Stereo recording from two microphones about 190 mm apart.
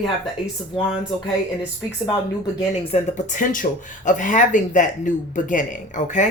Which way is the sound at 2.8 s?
40° left (ahead or behind).